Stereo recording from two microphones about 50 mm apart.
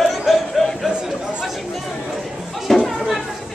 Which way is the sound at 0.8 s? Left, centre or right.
Centre.